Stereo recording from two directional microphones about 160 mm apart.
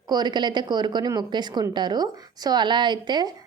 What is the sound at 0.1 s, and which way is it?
A woman's voice, 25° right (ahead or behind).